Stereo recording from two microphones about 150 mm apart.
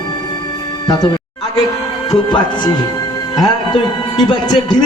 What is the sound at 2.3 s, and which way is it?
A man's voice, 30° left (ahead or behind).